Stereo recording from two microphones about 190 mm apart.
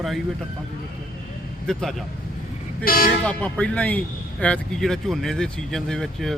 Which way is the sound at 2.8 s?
50° left (ahead or behind).